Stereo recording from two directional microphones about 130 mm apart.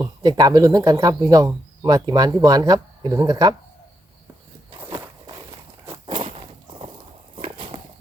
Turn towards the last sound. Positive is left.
turn(degrees=-40)  # may be behind; listen again after turning